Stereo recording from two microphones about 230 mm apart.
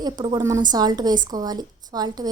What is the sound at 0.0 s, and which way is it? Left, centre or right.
A woman's voice, centre.